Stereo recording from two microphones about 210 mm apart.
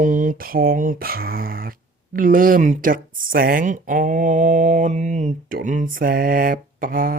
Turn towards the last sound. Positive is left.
turn(degrees=-40)  # may be behind; listen again after turning